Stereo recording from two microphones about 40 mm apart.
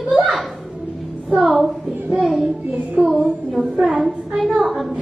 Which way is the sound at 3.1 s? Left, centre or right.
Right.